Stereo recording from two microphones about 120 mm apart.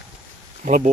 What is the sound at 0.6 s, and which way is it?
Speech, 90° right.